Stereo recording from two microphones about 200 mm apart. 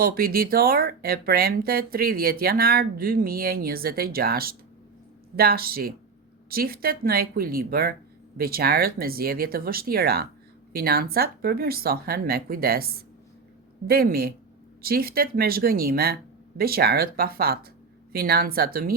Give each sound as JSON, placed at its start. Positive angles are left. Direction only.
{"t": 0.0, "sound": "speech", "side_deg": -50}